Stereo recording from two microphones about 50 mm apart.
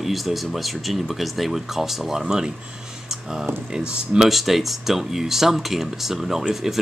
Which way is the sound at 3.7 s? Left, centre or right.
Centre.